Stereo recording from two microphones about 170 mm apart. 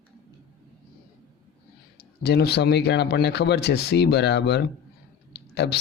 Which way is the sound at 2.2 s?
75° left (ahead or behind).